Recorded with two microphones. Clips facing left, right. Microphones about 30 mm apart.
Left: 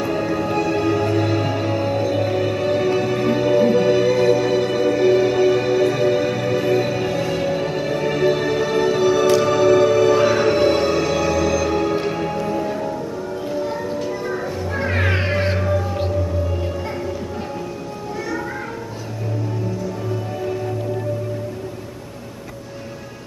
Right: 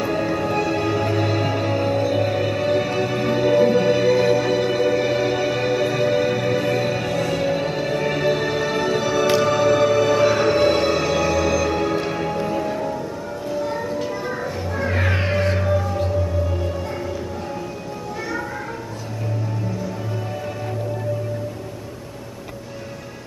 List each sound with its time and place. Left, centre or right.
0.0 s music: centre
13.5 s train: centre
13.9 s music: centre
14.8 s music: centre
15.6 s music: centre